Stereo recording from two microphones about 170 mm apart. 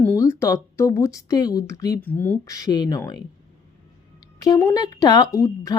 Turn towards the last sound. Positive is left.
turn(degrees=20)  # may be behind; listen again after turning